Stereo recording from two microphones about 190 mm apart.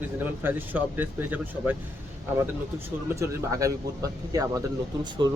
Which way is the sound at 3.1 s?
15° right (ahead or behind).